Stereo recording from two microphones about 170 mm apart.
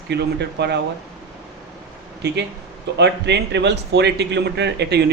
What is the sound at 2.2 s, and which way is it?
Speech, 90° right.